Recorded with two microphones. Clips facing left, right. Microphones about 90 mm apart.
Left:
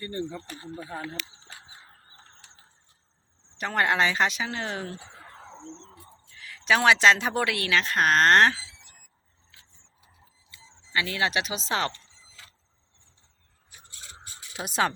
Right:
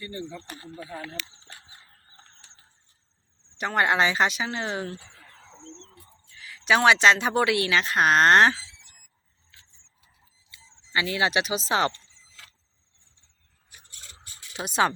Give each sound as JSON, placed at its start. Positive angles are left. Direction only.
{"t": 0.0, "sound": "speech", "side_deg": 45}
{"t": 0.9, "sound": "speech", "side_deg": 35}
{"t": 3.6, "sound": "a woman's voice", "side_deg": -5}
{"t": 5.1, "sound": "a sound", "side_deg": 40}
{"t": 5.6, "sound": "speech", "side_deg": 15}
{"t": 6.4, "sound": "a woman's voice", "side_deg": -5}
{"t": 10.9, "sound": "speech", "side_deg": -5}
{"t": 14.5, "sound": "a woman's voice", "side_deg": 0}